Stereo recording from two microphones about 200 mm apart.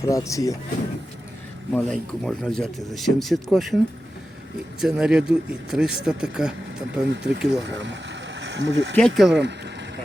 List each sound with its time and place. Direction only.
0.0 s speech: 15° left (ahead or behind)
1.7 s speech: 5° left (ahead or behind)
4.8 s speech: 5° right (ahead or behind)
7.1 s speech: 55° right (ahead or behind)
9.0 s speech: centre (ahead or behind)
9.3 s speech: 60° right (ahead or behind)